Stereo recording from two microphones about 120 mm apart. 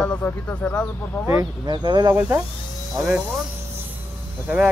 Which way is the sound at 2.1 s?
15° right (ahead or behind).